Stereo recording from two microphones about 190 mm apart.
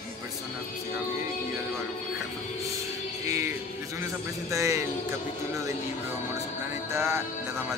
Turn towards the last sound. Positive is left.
turn(degrees=-15)  # may be behind; listen again after turning